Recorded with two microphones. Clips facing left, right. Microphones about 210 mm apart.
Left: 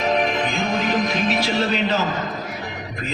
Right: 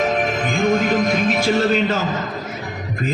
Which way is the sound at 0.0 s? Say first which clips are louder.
Right 1 dB; 50° right (ahead or behind).